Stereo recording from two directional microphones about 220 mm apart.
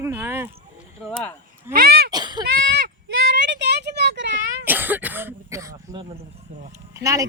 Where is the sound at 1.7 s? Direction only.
45° right (ahead or behind).